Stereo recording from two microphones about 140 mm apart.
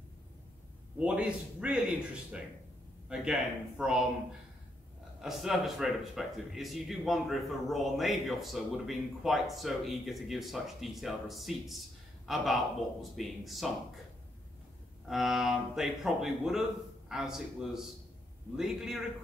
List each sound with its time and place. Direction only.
0.9 s speech: 10° right (ahead or behind)
5.2 s speech: 5° right (ahead or behind)
15.0 s speech: centre (ahead or behind)